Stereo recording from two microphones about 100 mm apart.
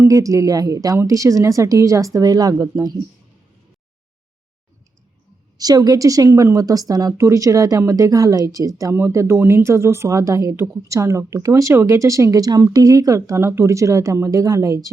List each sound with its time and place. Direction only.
0.0 s speech: 35° right (ahead or behind)
5.5 s speech: 40° right (ahead or behind)